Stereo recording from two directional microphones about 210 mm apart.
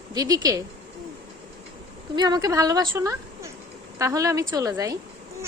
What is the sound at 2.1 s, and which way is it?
A woman's voice, 20° right (ahead or behind).